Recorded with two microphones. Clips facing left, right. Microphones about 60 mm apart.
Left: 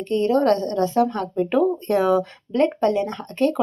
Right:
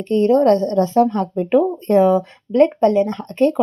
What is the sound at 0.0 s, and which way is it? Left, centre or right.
A woman's voice, right.